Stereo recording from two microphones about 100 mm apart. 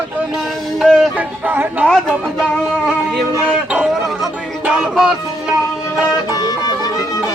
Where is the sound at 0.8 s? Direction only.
Centre (ahead or behind).